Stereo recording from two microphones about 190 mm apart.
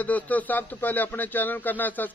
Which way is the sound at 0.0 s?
10° left (ahead or behind).